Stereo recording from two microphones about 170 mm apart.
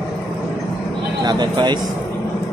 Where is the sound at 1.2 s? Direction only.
25° right (ahead or behind).